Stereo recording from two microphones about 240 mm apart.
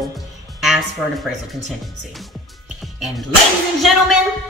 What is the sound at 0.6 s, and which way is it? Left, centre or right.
Speech, centre.